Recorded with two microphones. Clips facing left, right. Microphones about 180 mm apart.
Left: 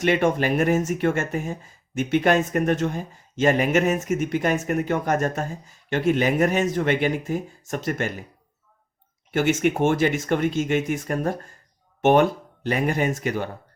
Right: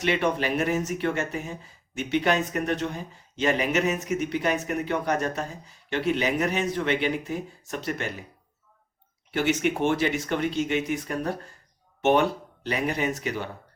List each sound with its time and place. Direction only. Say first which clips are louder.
0.0 s speech: left 4 dB; 45° left (ahead or behind)
9.3 s speech: left 4 dB; 50° left (ahead or behind)